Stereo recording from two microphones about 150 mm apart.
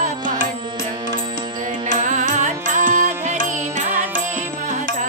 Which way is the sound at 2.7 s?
55° right (ahead or behind).